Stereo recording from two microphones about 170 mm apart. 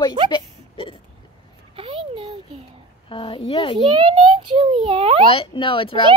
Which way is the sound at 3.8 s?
25° right (ahead or behind).